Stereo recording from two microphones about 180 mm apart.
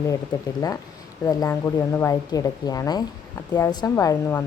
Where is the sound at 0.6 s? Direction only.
20° left (ahead or behind).